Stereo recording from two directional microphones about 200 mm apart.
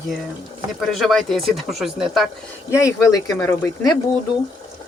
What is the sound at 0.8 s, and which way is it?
Speech, centre (ahead or behind).